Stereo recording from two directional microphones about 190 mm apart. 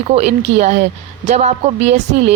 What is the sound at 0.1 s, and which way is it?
Speech, 35° right (ahead or behind).